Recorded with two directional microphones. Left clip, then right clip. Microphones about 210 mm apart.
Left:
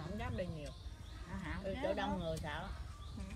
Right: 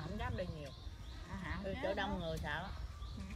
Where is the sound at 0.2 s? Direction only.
15° right (ahead or behind).